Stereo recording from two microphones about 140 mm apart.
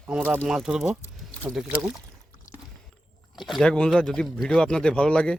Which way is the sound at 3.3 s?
Centre (ahead or behind).